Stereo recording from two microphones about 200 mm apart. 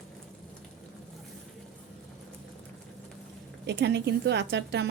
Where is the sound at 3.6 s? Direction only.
60° right (ahead or behind).